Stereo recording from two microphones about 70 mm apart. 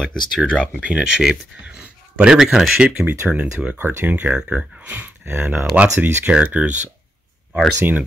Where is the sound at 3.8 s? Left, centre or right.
Right.